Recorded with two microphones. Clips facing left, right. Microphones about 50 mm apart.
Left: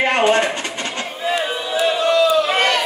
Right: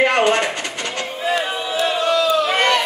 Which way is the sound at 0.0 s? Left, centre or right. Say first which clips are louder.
Even; left.